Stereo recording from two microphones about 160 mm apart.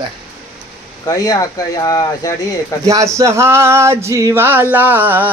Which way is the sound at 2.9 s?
20° right (ahead or behind).